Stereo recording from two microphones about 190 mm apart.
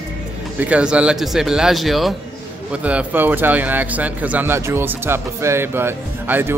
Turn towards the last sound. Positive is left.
turn(degrees=-10)  # may be behind; listen again after turning